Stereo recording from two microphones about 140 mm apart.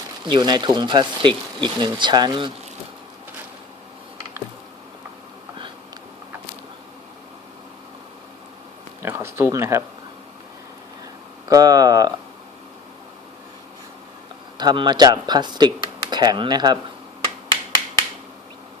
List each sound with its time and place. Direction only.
0.3 s speech: 35° right (ahead or behind)
9.0 s a sound: 15° right (ahead or behind)
11.4 s speech: 25° right (ahead or behind)
14.6 s speech: 30° right (ahead or behind)